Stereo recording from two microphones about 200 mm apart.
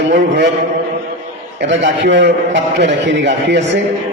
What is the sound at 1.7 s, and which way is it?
A man's voice, 60° right (ahead or behind).